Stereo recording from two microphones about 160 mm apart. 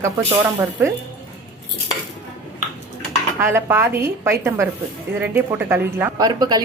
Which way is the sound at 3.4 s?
15° right (ahead or behind).